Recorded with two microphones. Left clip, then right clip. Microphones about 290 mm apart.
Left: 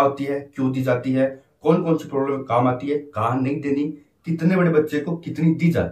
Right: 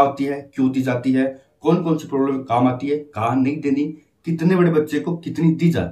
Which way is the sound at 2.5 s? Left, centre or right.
Centre.